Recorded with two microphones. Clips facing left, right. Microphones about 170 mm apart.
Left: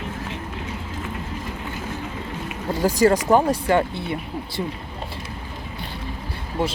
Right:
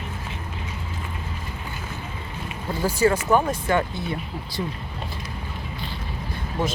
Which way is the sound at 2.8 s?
40° left (ahead or behind).